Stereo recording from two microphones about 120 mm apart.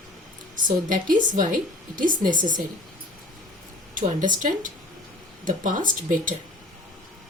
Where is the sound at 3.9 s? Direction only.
90° right.